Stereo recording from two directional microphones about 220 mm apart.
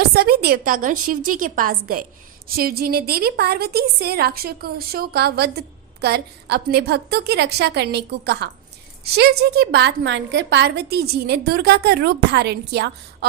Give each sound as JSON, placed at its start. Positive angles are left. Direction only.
{"t": 0.0, "sound": "a woman's voice", "side_deg": -45}